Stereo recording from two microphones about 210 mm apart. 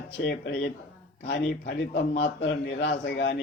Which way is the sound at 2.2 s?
55° left (ahead or behind).